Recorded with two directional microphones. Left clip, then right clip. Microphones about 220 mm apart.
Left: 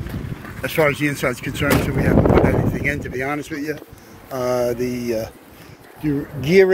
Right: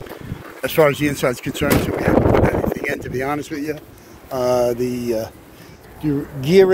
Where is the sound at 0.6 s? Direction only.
20° right (ahead or behind).